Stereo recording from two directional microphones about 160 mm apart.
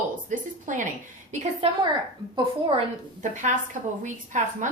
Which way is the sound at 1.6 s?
40° right (ahead or behind).